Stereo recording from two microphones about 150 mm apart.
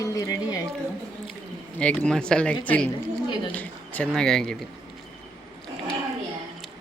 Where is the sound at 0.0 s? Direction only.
25° left (ahead or behind).